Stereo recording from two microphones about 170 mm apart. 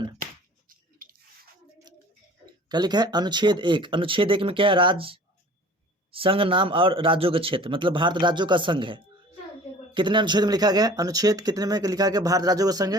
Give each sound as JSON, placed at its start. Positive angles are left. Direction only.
{"t": 0.7, "sound": "chewing", "side_deg": -55}
{"t": 2.6, "sound": "a man's voice", "side_deg": -25}